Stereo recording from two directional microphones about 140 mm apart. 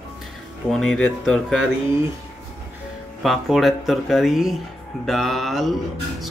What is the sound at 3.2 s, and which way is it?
Speech, centre (ahead or behind).